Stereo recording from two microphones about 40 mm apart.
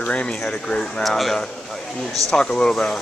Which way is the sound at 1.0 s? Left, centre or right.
Centre.